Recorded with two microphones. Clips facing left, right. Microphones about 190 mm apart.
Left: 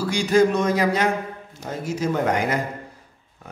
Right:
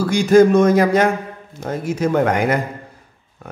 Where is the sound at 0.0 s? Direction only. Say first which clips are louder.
Right 6 dB; 45° right (ahead or behind).